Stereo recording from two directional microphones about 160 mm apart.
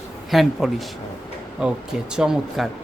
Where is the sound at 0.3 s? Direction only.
Centre (ahead or behind).